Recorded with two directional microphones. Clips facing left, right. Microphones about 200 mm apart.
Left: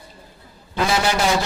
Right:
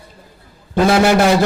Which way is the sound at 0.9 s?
55° right (ahead or behind).